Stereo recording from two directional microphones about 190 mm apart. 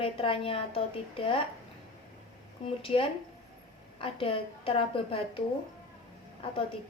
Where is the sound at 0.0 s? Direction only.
30° left (ahead or behind).